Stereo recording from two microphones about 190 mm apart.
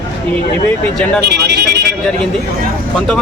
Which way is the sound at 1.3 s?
60° right (ahead or behind).